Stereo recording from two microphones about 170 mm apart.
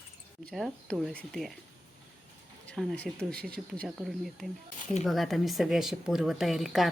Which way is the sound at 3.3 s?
65° right (ahead or behind).